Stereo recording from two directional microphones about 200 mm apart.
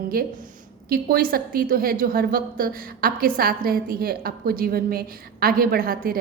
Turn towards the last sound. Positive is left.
turn(degrees=-45)  # may be behind; listen again after turning